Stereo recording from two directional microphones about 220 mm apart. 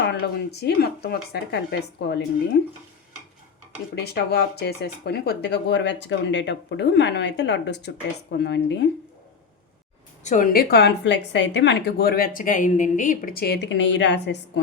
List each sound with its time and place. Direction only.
0.0 s speech: 50° left (ahead or behind)
3.9 s speech: 45° left (ahead or behind)
10.2 s speech: 35° left (ahead or behind); by 14.6 s 55° left (ahead or behind)